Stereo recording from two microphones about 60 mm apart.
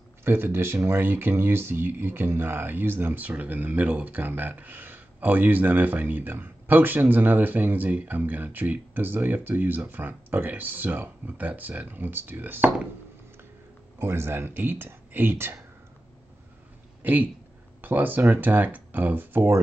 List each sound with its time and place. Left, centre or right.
0.2 s speech: right
14.0 s speech: right
17.0 s speech: right